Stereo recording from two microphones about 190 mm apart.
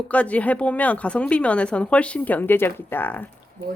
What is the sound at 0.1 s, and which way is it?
A woman's voice, 5° left (ahead or behind).